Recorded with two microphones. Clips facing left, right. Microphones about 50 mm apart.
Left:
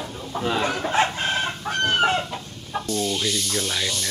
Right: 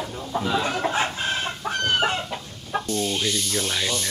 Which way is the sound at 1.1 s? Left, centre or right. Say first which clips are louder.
Left 2 dB; left.